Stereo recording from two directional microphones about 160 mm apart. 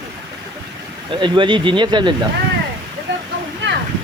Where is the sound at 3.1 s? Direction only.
90° right.